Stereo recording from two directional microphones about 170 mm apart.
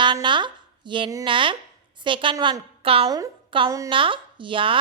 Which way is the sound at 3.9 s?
30° right (ahead or behind).